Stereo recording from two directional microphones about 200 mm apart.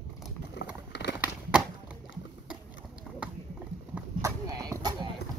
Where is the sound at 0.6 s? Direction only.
60° left (ahead or behind).